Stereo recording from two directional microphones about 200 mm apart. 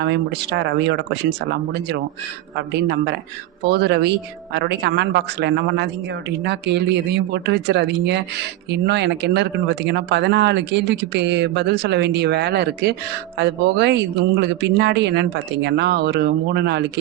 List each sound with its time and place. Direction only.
0.0 s speech: 60° right (ahead or behind)